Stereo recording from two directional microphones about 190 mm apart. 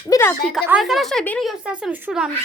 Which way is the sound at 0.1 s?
15° left (ahead or behind).